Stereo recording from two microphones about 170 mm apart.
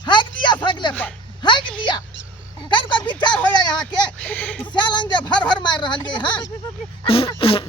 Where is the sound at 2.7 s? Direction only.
30° left (ahead or behind).